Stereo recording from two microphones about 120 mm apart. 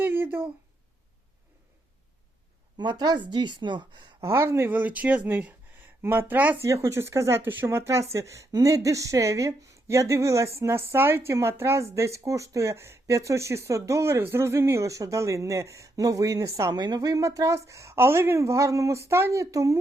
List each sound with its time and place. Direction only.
0.0 s a sound: 20° right (ahead or behind)
2.7 s a woman's voice: 35° right (ahead or behind)
4.3 s speech: 25° right (ahead or behind)